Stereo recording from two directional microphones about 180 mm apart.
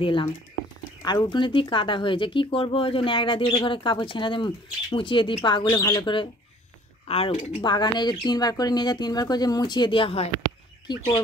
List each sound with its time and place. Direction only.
1.0 s speech: 25° left (ahead or behind)